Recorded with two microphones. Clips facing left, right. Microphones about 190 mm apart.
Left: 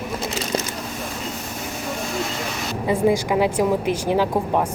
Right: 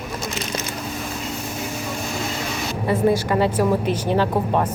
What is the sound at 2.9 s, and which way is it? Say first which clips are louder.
A woman's voice: even; 10° left (ahead or behind).